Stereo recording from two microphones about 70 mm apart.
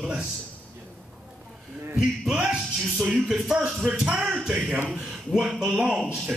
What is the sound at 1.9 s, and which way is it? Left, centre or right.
Speech, centre.